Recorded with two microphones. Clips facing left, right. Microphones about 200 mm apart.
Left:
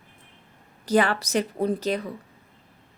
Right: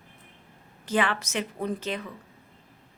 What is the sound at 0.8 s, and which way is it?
A woman's voice, 40° left (ahead or behind).